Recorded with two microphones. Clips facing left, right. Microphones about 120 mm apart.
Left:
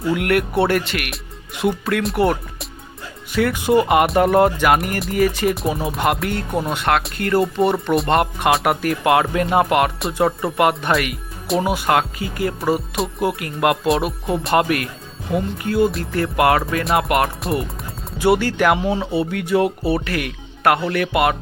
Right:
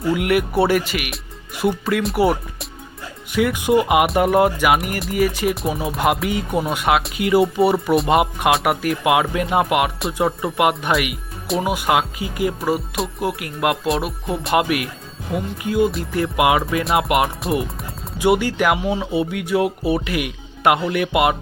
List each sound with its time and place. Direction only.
0.1 s speech: centre (ahead or behind)
11.4 s speech: centre (ahead or behind)
11.7 s speech: 10° right (ahead or behind)
18.2 s speech: 15° right (ahead or behind)